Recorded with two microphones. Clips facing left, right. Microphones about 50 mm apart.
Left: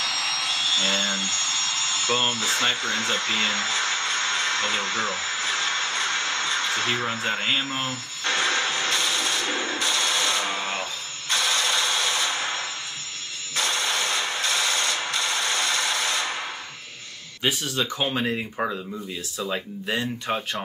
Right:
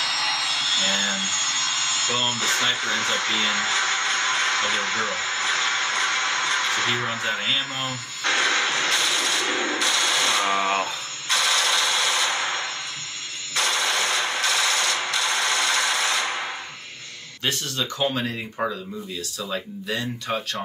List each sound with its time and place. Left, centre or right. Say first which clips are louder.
0.0 s a sound: right 2 dB; right
2.0 s speech: left 3 dB; left
2.3 s speech: right 1 dB; right
3.4 s music: right 2 dB; right
7.2 s music: even; left
7.8 s radio: right 2 dB; right
13.6 s a sound: right 2 dB; right
17.4 s speech: left 2 dB; centre
19.5 s music: even; left